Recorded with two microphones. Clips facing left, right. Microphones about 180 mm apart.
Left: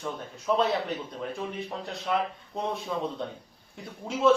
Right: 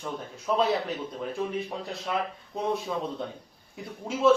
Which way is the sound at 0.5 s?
Centre (ahead or behind).